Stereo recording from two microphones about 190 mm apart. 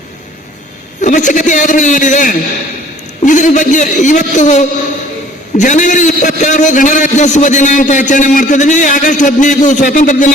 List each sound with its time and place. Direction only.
1.0 s a man's voice: 40° left (ahead or behind)